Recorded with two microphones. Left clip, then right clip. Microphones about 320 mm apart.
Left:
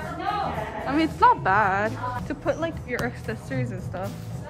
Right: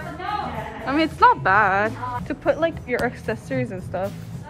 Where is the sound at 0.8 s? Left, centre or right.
Centre.